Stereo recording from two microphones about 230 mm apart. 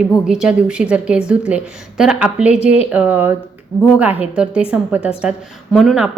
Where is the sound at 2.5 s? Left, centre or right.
Left.